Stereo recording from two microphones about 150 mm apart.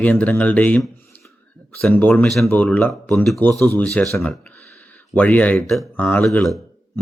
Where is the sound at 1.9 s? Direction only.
10° left (ahead or behind).